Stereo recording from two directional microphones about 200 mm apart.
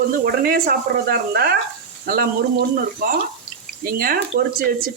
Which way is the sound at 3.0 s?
45° right (ahead or behind).